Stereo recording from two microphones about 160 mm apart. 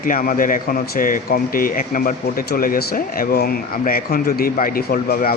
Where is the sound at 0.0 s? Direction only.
60° left (ahead or behind).